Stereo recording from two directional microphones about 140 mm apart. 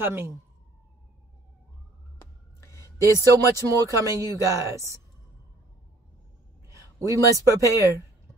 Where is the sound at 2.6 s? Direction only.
20° left (ahead or behind).